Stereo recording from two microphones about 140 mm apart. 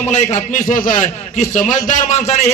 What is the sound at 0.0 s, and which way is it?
A man's voice, 55° left (ahead or behind).